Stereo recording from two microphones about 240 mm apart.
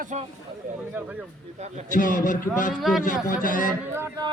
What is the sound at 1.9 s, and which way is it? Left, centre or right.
Music, left.